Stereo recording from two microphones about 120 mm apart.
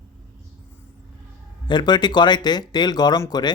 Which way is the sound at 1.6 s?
40° left (ahead or behind).